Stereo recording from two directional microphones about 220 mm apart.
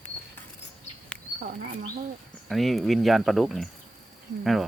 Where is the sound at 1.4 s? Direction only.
45° right (ahead or behind).